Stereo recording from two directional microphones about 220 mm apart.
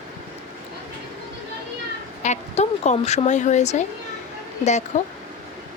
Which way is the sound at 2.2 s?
30° left (ahead or behind).